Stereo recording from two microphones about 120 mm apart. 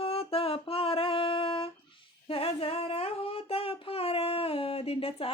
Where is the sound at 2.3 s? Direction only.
55° left (ahead or behind).